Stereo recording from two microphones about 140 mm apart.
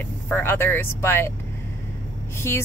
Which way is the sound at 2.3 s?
20° left (ahead or behind).